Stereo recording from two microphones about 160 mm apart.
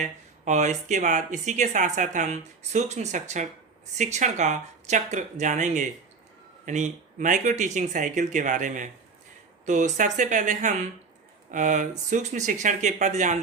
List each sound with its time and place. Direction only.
0.0 s speech: 50° right (ahead or behind)